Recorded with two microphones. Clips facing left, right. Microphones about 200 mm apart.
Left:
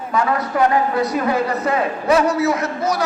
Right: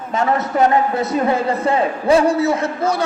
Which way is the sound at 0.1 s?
25° right (ahead or behind).